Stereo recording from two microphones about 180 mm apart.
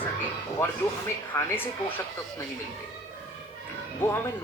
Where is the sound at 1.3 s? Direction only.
10° left (ahead or behind).